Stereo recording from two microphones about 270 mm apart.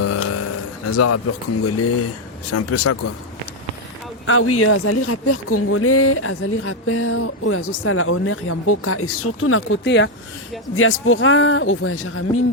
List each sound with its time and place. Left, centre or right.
0.0 s a sound: left
0.9 s speech: left
4.3 s speech: left